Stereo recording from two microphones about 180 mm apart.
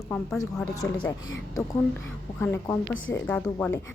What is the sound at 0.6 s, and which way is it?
Speech, 20° left (ahead or behind).